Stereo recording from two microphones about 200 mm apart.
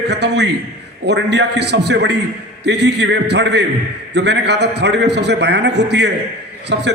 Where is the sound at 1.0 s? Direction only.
60° right (ahead or behind).